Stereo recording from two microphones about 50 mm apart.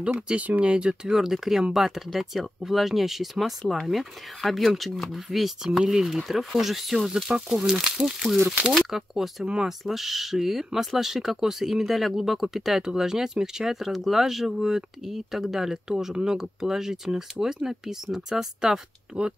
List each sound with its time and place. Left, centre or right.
0.4 s speech: right
1.1 s speech: centre